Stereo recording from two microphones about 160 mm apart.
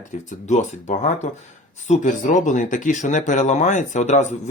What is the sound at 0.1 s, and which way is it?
Speech, 50° left (ahead or behind).